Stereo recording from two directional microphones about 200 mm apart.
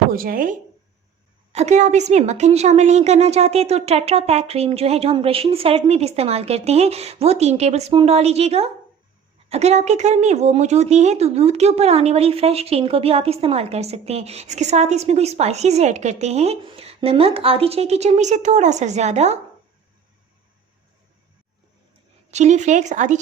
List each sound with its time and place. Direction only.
0.1 s speech: 45° right (ahead or behind)
1.5 s speech: 35° right (ahead or behind)
22.3 s speech: 35° right (ahead or behind)